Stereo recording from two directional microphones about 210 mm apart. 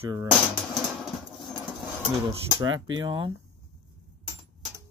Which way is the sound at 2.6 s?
20° right (ahead or behind).